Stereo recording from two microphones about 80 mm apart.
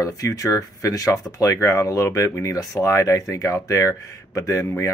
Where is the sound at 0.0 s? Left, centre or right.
Left.